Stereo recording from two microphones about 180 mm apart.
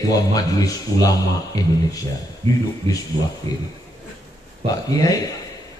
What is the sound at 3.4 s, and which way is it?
Speech, 30° right (ahead or behind).